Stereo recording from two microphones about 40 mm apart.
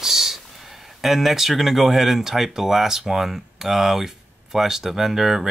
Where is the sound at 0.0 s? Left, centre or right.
Centre.